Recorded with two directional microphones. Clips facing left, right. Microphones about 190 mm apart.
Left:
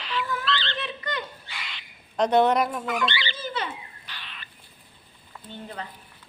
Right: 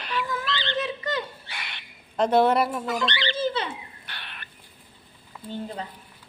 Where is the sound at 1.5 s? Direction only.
60° right (ahead or behind).